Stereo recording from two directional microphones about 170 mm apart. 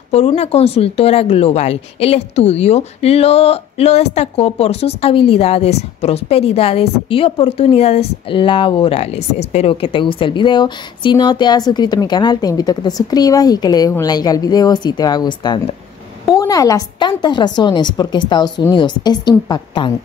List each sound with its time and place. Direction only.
0.1 s a woman's voice: 35° left (ahead or behind)